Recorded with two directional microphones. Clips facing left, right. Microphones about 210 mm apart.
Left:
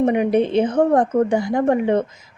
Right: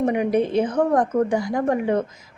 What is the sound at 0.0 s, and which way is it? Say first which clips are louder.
Speech: left 3 dB; 25° left (ahead or behind).